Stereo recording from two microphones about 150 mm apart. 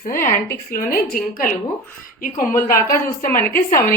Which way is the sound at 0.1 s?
70° left (ahead or behind).